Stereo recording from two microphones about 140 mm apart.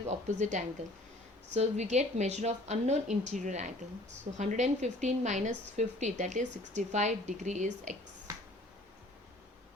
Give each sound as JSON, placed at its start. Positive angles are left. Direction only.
{"t": 0.1, "sound": "a woman's voice", "side_deg": -60}